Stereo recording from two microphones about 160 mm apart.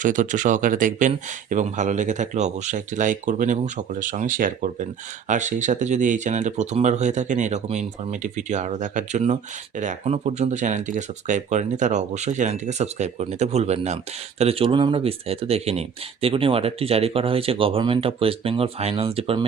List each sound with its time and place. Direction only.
0.0 s speech: 55° right (ahead or behind); by 19.5 s 35° right (ahead or behind)